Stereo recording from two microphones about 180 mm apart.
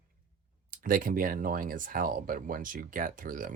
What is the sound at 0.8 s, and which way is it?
Speech, 50° right (ahead or behind).